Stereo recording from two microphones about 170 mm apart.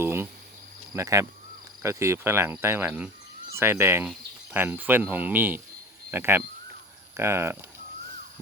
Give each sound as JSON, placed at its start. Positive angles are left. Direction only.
{"t": 0.0, "sound": "cricket", "side_deg": -15}
{"t": 6.1, "sound": "speech", "side_deg": -15}
{"t": 7.2, "sound": "cricket", "side_deg": -15}